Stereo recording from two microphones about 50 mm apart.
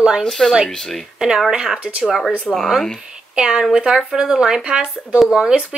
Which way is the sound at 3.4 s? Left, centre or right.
Centre.